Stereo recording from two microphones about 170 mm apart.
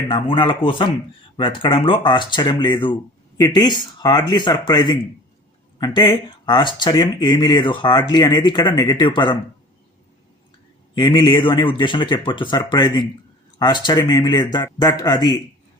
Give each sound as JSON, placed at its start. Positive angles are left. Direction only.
{"t": 0.1, "sound": "speech", "side_deg": 30}
{"t": 10.9, "sound": "speech", "side_deg": 25}